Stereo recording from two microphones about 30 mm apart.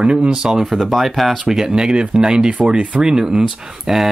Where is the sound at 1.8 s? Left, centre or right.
Right.